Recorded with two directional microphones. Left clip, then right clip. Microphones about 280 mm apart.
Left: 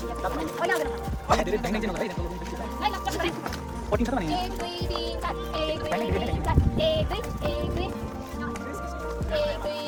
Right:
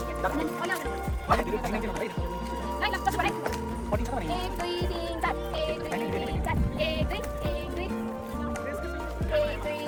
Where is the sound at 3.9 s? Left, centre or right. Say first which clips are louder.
Left 5 dB; left.